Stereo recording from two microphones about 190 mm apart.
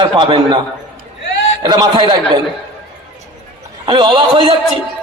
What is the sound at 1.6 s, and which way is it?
Speech, 20° right (ahead or behind).